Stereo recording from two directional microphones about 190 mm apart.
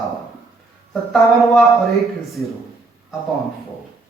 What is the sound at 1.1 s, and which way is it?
Speech, centre (ahead or behind).